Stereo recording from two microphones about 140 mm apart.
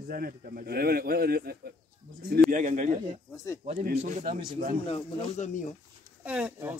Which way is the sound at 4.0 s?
60° right (ahead or behind).